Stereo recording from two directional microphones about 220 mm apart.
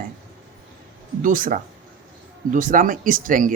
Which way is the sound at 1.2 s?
35° right (ahead or behind).